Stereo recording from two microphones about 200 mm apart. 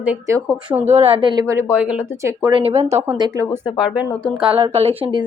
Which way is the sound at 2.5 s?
30° right (ahead or behind).